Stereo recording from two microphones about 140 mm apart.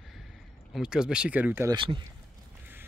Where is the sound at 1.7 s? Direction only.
35° right (ahead or behind).